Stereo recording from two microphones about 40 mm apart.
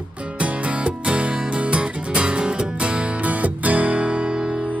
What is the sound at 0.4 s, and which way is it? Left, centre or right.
Music, right.